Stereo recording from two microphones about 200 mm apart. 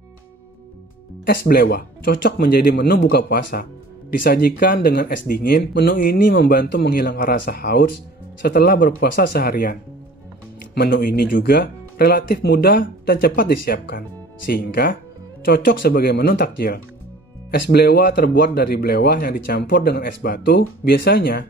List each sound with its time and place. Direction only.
1.2 s speech: 45° left (ahead or behind)